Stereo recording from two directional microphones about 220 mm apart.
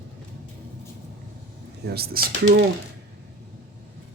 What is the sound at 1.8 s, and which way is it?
Speech, 45° right (ahead or behind).